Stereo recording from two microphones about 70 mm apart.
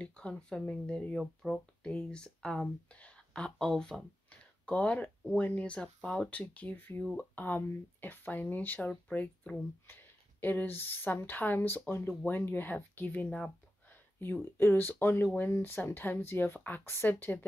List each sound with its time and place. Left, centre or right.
0.0 s speech: centre
1.2 s speech: centre
1.8 s speech: centre
4.3 s a sound: centre
5.4 s speech: left
9.9 s speech: left